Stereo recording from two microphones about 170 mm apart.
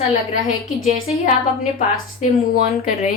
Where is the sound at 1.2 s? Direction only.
50° left (ahead or behind).